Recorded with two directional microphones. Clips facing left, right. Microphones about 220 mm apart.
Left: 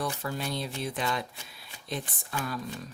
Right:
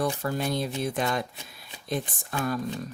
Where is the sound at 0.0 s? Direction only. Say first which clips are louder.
Right 5 dB; 45° right (ahead or behind).